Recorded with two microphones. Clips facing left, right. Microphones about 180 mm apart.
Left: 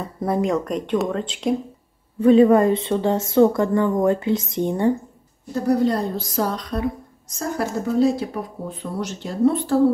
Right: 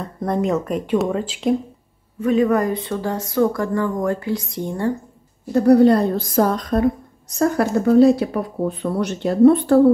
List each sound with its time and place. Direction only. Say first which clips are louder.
0.0 s speech: right 1 dB; 5° left (ahead or behind)
2.1 s speech: left 4 dB; 30° left (ahead or behind)
5.5 s a woman's voice: right 7 dB; 65° right (ahead or behind)